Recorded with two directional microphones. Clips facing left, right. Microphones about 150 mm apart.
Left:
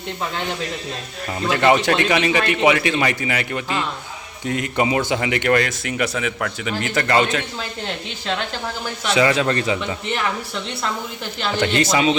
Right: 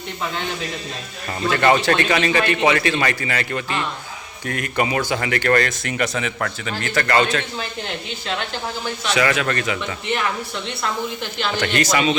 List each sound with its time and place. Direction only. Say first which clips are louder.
1.5 s speech: even; 15° left (ahead or behind)
6.7 s speech: even; 15° left (ahead or behind)
9.0 s a man's voice: left 3 dB; 25° left (ahead or behind)
11.5 s a man's voice: left 2 dB; 25° left (ahead or behind)